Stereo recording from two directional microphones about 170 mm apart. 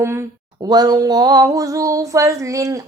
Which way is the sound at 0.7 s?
25° right (ahead or behind).